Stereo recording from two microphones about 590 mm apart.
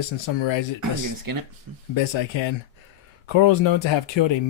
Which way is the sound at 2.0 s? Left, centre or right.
Left.